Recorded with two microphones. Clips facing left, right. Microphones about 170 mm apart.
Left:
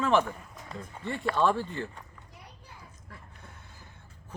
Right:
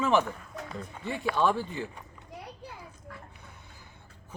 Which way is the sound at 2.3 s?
70° right (ahead or behind).